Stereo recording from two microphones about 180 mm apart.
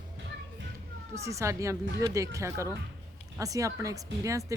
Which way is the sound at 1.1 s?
15° right (ahead or behind).